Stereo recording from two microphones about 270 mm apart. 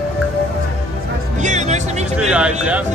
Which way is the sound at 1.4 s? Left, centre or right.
Right.